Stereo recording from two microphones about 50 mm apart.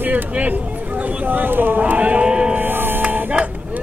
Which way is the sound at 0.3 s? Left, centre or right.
Right.